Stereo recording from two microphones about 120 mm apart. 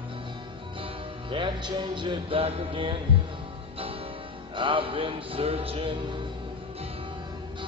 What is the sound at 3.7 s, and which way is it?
Music, 50° right (ahead or behind).